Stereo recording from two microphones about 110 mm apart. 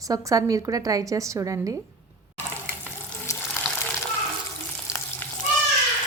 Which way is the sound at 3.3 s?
25° left (ahead or behind).